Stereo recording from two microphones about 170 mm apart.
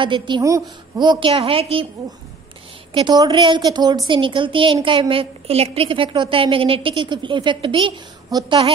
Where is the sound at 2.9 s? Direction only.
25° right (ahead or behind).